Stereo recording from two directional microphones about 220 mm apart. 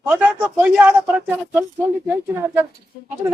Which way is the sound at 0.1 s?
5° right (ahead or behind).